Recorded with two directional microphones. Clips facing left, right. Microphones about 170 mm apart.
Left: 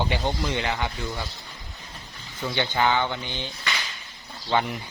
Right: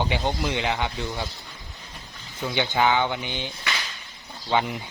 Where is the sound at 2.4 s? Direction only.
10° right (ahead or behind).